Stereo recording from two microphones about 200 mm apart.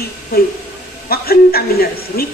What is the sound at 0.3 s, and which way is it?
A woman's voice, 50° left (ahead or behind).